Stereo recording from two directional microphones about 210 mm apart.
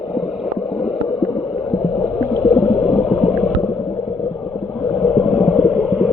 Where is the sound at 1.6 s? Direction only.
15° left (ahead or behind).